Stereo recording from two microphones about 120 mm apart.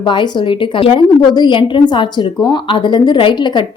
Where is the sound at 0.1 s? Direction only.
40° left (ahead or behind).